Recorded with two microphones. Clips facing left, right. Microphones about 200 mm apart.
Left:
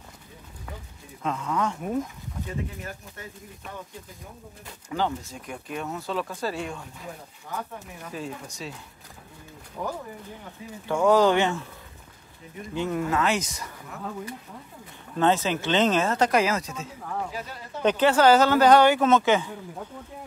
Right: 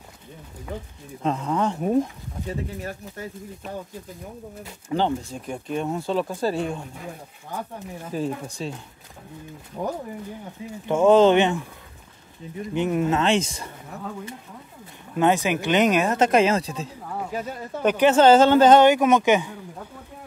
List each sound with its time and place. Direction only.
1.2 s speech: 35° right (ahead or behind)
4.8 s speech: 30° right (ahead or behind)
8.0 s speech: 35° right (ahead or behind)
10.9 s speech: 25° right (ahead or behind)
12.7 s speech: 20° right (ahead or behind)
15.1 s speech: 15° right (ahead or behind); by 16.9 s 30° right (ahead or behind)
17.8 s speech: 15° right (ahead or behind)